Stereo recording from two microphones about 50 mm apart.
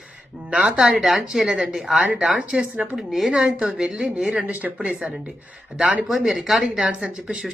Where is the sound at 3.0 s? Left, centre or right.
Centre.